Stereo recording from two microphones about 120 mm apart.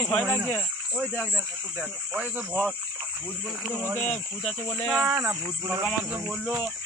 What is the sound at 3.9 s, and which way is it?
Speech, 10° left (ahead or behind).